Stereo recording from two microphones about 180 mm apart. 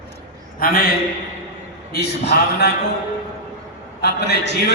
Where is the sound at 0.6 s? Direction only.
55° left (ahead or behind).